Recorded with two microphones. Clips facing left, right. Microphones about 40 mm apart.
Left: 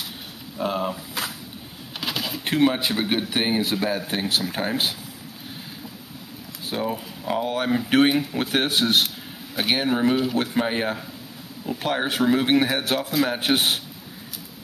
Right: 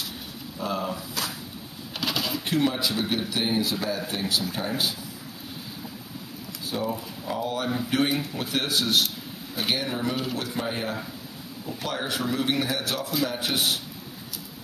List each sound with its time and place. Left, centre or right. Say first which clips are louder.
0.6 s speech: left 4 dB; left
2.0 s a sound: even; centre
2.4 s speech: left 6 dB; left
6.7 s speech: left 2 dB; left